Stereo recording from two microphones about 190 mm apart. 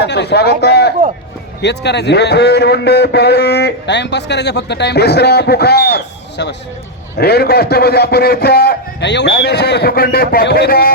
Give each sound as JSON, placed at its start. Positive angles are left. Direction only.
{"t": 0.0, "sound": "a man's voice", "side_deg": 60}